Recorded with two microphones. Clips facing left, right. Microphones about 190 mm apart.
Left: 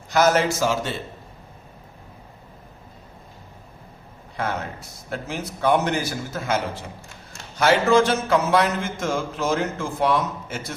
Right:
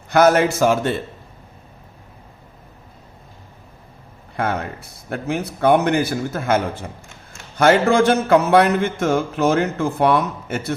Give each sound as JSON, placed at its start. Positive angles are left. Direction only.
{"t": 0.1, "sound": "music", "side_deg": -55}
{"t": 4.4, "sound": "music", "side_deg": -55}